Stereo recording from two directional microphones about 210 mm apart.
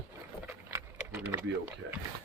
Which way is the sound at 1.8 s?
60° right (ahead or behind).